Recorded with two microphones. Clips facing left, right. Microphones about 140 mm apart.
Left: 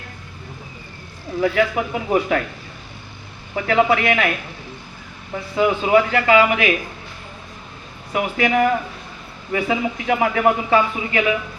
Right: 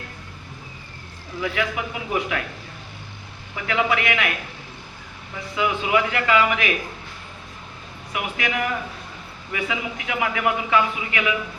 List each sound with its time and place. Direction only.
1.4 s speech: 40° left (ahead or behind)
3.5 s speech: 40° left (ahead or behind)
5.5 s speech: 40° left (ahead or behind)
8.1 s speech: 40° left (ahead or behind)